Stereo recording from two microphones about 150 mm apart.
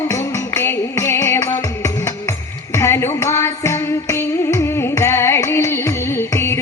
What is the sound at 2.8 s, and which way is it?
Music, 20° left (ahead or behind).